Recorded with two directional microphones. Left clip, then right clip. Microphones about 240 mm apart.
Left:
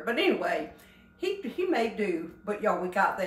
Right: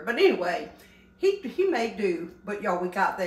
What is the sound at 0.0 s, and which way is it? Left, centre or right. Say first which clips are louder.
Speech: right 4 dB; centre.